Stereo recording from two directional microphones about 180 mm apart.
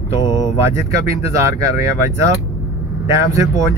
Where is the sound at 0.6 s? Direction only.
15° right (ahead or behind).